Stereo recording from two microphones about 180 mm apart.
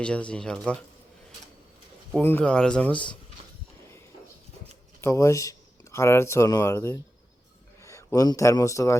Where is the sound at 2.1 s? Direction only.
10° left (ahead or behind).